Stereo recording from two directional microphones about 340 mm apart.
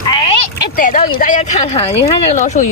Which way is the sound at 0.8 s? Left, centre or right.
Left.